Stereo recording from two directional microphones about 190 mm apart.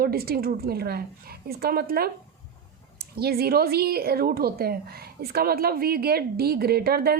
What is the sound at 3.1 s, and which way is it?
Speech, 55° right (ahead or behind).